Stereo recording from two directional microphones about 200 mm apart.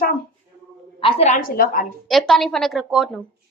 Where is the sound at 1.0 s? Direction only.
30° left (ahead or behind); by 1.8 s 45° left (ahead or behind).